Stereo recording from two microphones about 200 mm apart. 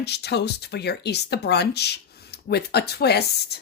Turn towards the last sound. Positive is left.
turn(degrees=55)  # may be behind; listen again after turning